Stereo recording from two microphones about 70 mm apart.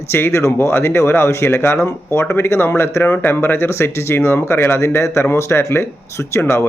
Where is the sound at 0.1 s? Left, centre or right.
Left.